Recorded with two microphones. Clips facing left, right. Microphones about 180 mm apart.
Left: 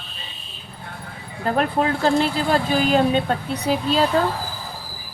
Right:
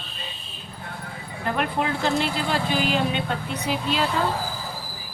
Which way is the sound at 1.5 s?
40° left (ahead or behind).